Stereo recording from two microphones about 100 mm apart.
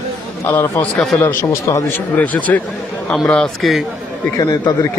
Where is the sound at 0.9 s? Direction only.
5° left (ahead or behind).